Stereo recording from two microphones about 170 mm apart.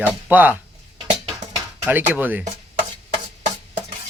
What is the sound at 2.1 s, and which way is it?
Speech, 10° right (ahead or behind).